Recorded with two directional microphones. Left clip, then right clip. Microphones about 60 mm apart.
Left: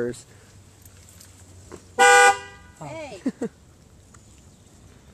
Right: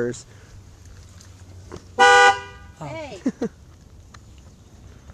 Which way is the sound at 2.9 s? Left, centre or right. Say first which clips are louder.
Right 2 dB; centre.